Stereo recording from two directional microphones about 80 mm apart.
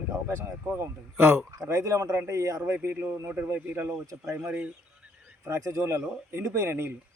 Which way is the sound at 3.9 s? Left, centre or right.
Right.